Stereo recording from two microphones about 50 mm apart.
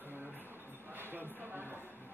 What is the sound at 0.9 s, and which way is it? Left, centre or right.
Music, right.